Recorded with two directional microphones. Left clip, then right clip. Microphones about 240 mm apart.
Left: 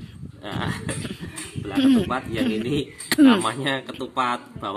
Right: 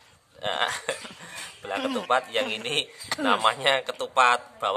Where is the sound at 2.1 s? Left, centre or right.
Right.